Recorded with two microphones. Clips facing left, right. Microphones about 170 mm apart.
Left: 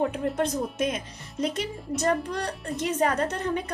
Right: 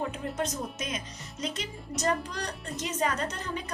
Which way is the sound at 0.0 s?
55° left (ahead or behind).